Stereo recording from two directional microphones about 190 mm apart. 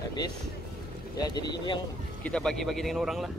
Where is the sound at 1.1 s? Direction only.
20° left (ahead or behind).